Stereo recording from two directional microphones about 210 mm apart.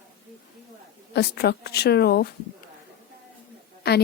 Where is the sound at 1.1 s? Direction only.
50° left (ahead or behind).